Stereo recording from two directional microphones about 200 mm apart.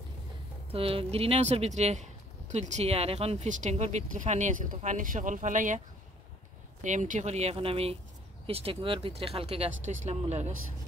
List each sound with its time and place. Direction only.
0.7 s speech: 30° right (ahead or behind)
6.8 s speech: 40° right (ahead or behind)